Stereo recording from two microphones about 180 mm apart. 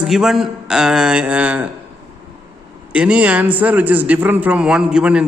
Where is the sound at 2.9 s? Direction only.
5° right (ahead or behind).